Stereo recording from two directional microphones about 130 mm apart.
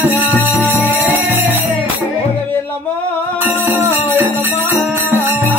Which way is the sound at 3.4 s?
15° right (ahead or behind).